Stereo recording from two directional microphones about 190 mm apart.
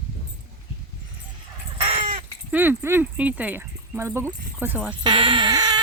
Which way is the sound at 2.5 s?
10° right (ahead or behind).